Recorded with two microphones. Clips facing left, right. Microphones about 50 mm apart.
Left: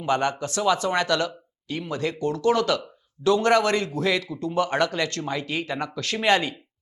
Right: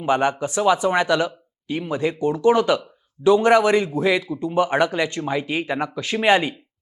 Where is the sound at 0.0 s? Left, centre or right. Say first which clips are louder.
Right 4 dB; centre.